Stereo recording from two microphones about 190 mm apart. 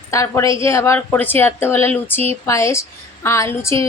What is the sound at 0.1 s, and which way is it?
Speech, 15° left (ahead or behind).